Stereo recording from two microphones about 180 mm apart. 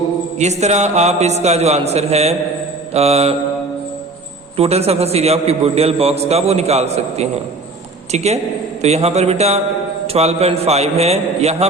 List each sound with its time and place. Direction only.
0.3 s a man's voice: 40° right (ahead or behind)
4.5 s a man's voice: 35° right (ahead or behind)